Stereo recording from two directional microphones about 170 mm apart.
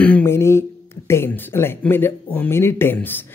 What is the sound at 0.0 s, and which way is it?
Speech, 10° left (ahead or behind).